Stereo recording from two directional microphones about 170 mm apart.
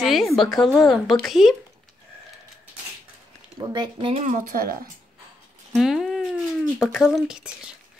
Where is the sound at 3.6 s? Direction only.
25° right (ahead or behind).